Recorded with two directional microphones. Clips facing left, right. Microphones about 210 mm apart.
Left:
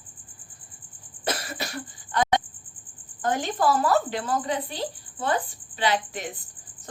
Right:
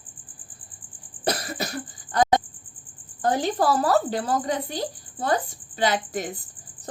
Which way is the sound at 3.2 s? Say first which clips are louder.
Right 2 dB; 35° right (ahead or behind).